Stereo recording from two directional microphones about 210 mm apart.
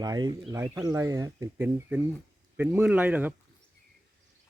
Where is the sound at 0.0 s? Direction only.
20° right (ahead or behind).